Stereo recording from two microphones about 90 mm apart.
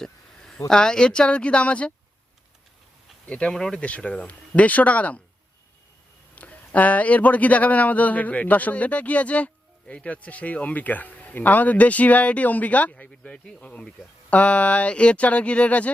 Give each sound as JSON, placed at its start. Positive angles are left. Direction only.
{"t": 0.0, "sound": "a sound", "side_deg": 5}
{"t": 0.7, "sound": "speech", "side_deg": 10}
{"t": 3.2, "sound": "speech", "side_deg": 10}
{"t": 6.3, "sound": "speech", "side_deg": 15}